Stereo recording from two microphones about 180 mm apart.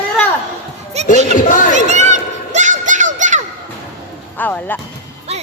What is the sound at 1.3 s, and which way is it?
Music, 45° left (ahead or behind).